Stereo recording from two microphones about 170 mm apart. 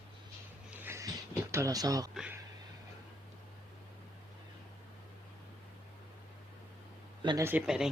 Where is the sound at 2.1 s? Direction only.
5° right (ahead or behind).